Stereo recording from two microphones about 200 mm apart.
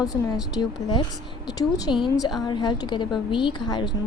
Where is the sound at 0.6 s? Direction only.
25° left (ahead or behind).